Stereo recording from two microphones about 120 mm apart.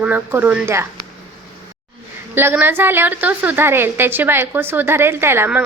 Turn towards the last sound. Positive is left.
turn(degrees=-15)  # may be behind; listen again after turning